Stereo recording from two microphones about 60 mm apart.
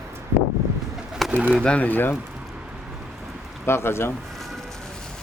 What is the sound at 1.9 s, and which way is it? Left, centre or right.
Speech, left.